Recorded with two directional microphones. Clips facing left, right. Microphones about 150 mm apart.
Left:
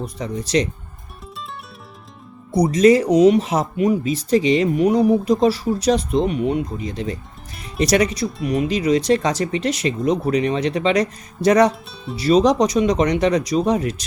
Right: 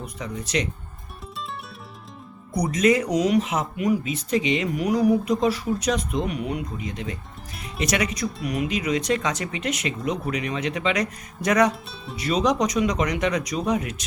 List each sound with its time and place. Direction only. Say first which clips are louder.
0.0 s speech: left 6 dB; 35° left (ahead or behind)
2.5 s speech: left 7 dB; 30° left (ahead or behind)
11.7 s speech: left 3 dB; centre (ahead or behind)
12.1 s speech: left 7 dB; 35° left (ahead or behind)